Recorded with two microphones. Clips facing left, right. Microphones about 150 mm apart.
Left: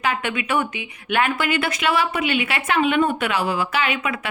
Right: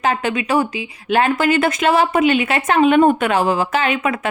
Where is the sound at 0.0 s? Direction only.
40° right (ahead or behind).